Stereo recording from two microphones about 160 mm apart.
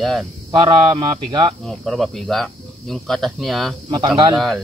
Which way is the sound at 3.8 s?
30° right (ahead or behind).